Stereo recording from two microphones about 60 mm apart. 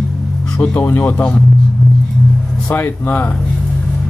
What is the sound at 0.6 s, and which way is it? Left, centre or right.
Speech, left.